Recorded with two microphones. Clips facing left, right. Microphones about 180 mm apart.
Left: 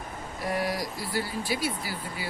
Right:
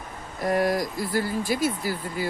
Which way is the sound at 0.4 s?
45° right (ahead or behind).